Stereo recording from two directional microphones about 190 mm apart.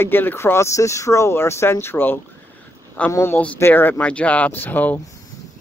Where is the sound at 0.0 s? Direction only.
10° left (ahead or behind).